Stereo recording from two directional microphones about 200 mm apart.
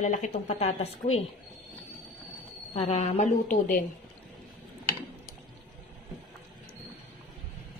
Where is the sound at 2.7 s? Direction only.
30° left (ahead or behind).